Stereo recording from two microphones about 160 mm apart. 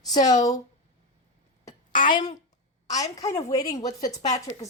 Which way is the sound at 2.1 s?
30° left (ahead or behind).